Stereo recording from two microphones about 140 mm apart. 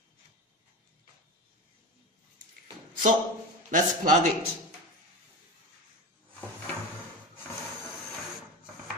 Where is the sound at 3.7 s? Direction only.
65° right (ahead or behind).